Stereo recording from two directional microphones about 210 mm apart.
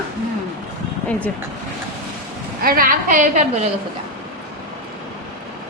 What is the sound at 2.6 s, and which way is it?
A woman's voice, 45° right (ahead or behind).